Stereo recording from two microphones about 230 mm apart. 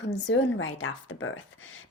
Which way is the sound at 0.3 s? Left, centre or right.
Left.